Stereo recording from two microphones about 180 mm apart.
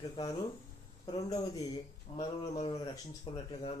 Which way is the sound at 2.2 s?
30° left (ahead or behind).